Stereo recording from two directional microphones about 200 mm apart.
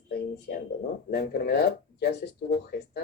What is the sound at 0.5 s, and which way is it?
Speech, 55° left (ahead or behind).